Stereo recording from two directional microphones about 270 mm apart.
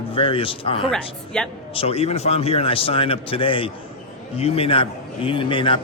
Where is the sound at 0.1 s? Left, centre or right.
Centre.